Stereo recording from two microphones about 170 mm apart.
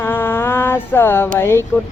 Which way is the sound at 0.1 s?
15° left (ahead or behind).